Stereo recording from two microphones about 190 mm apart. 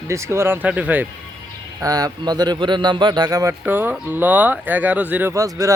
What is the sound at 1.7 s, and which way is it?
Speech, 20° right (ahead or behind).